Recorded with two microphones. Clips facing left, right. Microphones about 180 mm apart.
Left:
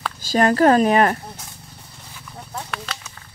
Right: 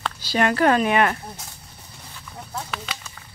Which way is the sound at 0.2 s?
40° left (ahead or behind).